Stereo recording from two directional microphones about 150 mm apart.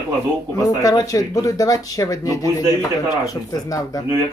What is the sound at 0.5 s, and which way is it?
Speech, 25° left (ahead or behind).